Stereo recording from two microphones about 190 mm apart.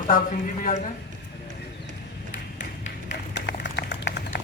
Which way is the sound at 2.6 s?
40° left (ahead or behind).